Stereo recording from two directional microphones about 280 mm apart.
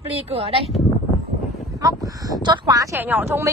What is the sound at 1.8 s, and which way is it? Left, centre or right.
A woman's voice, centre.